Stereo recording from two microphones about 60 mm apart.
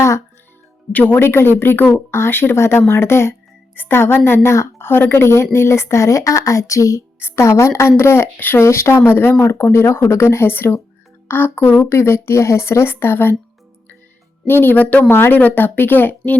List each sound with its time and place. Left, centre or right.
0.9 s speech: left
4.9 s a woman's voice: left
7.2 s speech: left
8.6 s speech: left
14.4 s speech: left
15.1 s speech: left